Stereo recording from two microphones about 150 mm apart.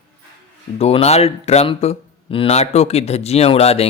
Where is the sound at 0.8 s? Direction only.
40° left (ahead or behind).